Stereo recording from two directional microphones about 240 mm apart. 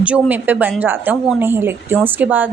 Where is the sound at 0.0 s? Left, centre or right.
Centre.